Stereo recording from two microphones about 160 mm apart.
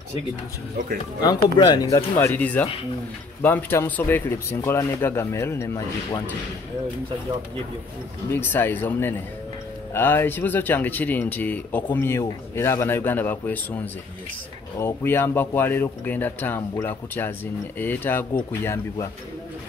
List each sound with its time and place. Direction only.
1.2 s speech: 25° left (ahead or behind)
8.3 s speech: 10° left (ahead or behind)
14.8 s speech: 15° left (ahead or behind)